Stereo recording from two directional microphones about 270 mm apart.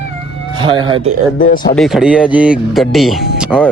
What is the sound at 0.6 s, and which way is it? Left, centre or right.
Speech, centre.